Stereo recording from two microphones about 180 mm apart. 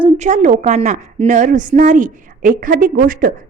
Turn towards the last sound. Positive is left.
turn(degrees=-50)  # may be behind; listen again after turning